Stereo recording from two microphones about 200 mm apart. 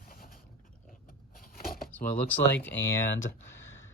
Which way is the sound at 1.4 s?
45° left (ahead or behind).